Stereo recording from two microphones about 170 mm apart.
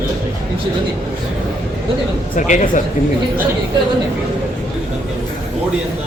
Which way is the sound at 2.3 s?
45° left (ahead or behind).